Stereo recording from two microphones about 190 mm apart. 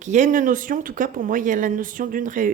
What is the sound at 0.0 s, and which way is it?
Speech, 40° right (ahead or behind).